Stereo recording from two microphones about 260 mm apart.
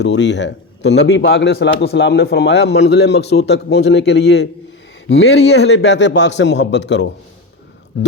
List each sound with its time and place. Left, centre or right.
0.0 s a man's voice: left